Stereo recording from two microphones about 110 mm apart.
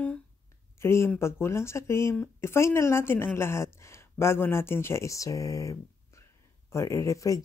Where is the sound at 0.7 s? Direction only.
25° left (ahead or behind).